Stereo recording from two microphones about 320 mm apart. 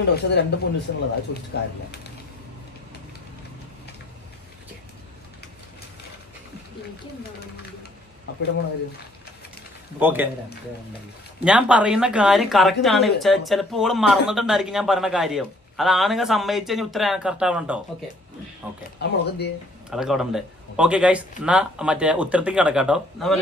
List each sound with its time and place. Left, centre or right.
0.1 s speech: left
9.9 s a woman's voice: centre
11.4 s a woman's voice: centre
18.9 s speech: left
19.9 s a woman's voice: centre